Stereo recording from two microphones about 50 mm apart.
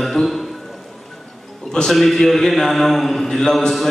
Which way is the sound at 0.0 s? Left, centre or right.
Centre.